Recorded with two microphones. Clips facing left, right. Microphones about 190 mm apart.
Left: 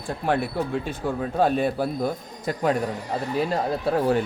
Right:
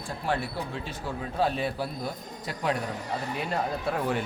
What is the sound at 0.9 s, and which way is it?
Speech, 50° left (ahead or behind).